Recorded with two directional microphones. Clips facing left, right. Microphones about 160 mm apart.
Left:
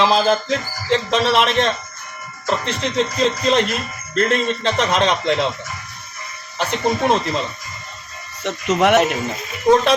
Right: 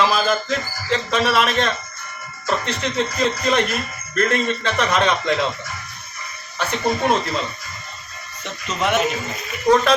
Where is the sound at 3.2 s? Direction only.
25° left (ahead or behind).